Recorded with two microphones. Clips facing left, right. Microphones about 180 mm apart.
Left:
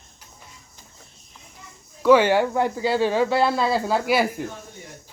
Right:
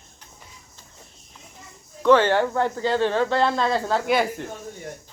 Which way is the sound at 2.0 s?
10° left (ahead or behind).